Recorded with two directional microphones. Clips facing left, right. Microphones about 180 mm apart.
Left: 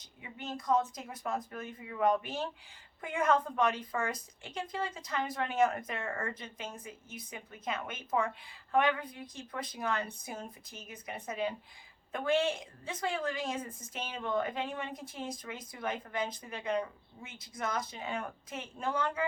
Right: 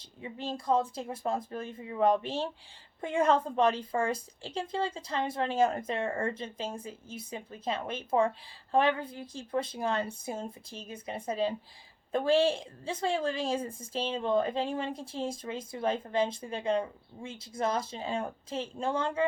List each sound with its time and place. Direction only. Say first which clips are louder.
0.0 s a woman's voice: right 6 dB; 30° right (ahead or behind)